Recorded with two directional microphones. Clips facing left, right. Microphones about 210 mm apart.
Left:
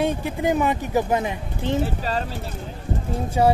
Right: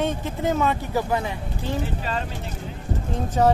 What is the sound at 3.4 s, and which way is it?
Speech, 10° left (ahead or behind).